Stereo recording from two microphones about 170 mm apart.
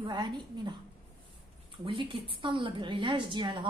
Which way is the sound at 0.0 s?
25° right (ahead or behind).